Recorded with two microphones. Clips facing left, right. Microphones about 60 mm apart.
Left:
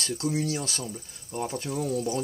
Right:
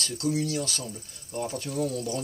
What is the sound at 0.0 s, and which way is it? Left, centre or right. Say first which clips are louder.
Speech: even; left.